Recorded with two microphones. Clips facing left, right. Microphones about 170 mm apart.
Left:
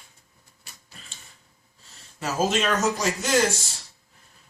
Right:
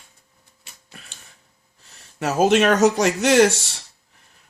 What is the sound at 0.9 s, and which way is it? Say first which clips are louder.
Tick-tock: right 5 dB; 65° right (ahead or behind).